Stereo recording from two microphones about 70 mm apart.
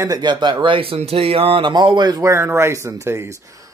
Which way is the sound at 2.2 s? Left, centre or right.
Right.